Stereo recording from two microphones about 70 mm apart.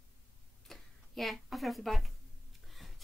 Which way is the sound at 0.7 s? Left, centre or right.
Centre.